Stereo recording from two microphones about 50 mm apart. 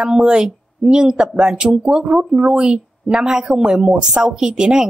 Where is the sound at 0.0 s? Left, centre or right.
Centre.